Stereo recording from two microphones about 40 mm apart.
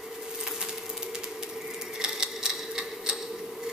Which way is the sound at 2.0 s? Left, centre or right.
Centre.